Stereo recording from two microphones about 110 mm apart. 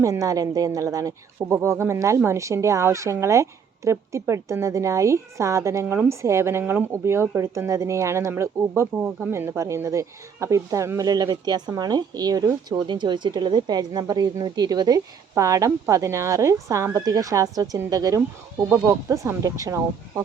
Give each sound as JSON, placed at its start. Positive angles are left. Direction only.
{"t": 0.0, "sound": "speech", "side_deg": -30}
{"t": 9.0, "sound": "speech", "side_deg": -10}
{"t": 9.3, "sound": "speech", "side_deg": -25}